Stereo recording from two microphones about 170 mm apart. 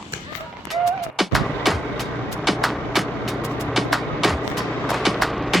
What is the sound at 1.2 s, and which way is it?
Artillery fire, centre (ahead or behind).